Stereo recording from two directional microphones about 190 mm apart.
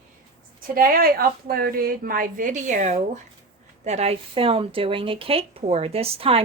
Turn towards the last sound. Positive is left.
turn(degrees=-30)  # may be behind; listen again after turning